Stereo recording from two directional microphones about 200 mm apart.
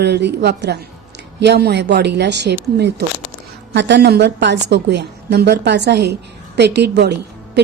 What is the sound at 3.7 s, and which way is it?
A woman's voice, 60° right (ahead or behind).